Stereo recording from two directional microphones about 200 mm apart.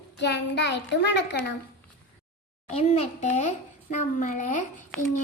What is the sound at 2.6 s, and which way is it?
A child's voice, 30° left (ahead or behind).